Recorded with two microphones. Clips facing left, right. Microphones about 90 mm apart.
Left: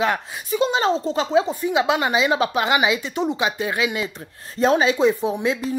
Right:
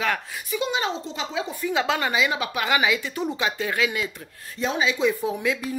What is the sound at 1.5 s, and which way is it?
Speech, 20° left (ahead or behind).